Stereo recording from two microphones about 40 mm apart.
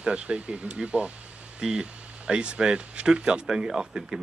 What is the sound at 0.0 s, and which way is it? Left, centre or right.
Speech, right.